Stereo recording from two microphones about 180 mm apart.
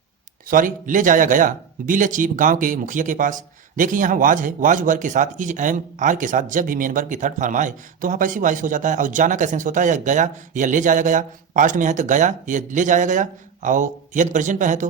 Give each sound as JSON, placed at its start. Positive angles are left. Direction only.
{"t": 0.4, "sound": "speech", "side_deg": -50}